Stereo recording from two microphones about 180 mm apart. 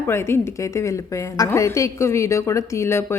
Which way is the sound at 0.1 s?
15° left (ahead or behind).